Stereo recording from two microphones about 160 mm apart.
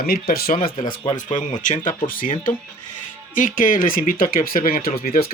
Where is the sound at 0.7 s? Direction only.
30° left (ahead or behind).